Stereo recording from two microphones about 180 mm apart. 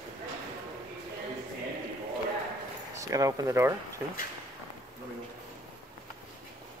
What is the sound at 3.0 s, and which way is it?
Speech, 20° right (ahead or behind).